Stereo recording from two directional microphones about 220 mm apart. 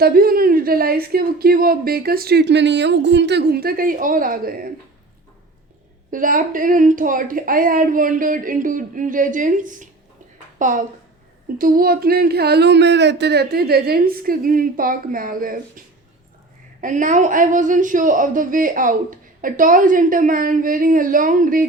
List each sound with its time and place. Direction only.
0.0 s a woman's voice: 40° right (ahead or behind)
6.1 s a woman's voice: 40° right (ahead or behind)
16.8 s a woman's voice: 35° right (ahead or behind)